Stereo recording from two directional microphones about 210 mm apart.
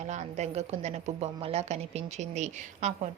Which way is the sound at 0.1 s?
35° right (ahead or behind).